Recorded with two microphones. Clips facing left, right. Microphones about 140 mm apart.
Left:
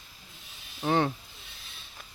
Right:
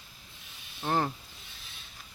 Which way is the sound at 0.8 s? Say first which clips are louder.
Left 3 dB; centre (ahead or behind).